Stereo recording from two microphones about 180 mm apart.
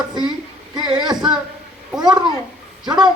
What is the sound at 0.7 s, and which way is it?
Speech, 25° right (ahead or behind).